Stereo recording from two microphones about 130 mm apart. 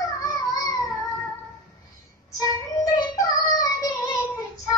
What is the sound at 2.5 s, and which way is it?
Child singing, 25° left (ahead or behind).